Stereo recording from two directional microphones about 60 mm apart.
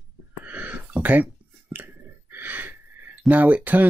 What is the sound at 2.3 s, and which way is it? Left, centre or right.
Gasp, right.